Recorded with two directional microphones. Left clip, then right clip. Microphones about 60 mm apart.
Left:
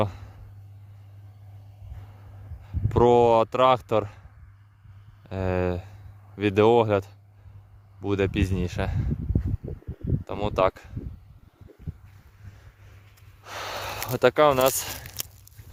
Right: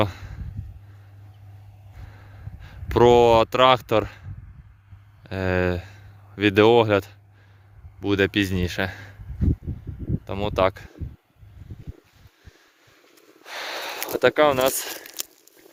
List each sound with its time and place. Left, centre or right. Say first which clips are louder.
0.0 s a sound: right 3 dB; centre
2.6 s speech: right 4 dB; centre
10.2 s speech: right 2 dB; left
13.4 s snort: right 2 dB; left
14.2 s speech: right 1 dB; left
14.8 s speech: right 2 dB; left
15.1 s walk: right 2 dB; left